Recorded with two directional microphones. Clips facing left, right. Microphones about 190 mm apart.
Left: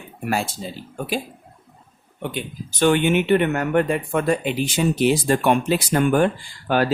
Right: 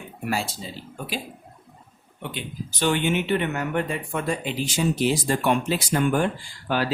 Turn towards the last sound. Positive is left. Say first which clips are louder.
# left 5 dB
turn(degrees=50)  # may be behind; listen again after turning